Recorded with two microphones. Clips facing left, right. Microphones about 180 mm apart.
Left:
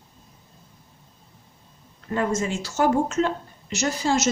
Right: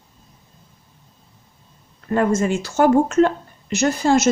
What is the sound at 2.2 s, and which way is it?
A woman's voice, 55° right (ahead or behind).